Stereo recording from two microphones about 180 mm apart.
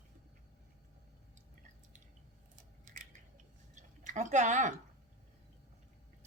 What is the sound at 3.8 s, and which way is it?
Speech, 45° right (ahead or behind).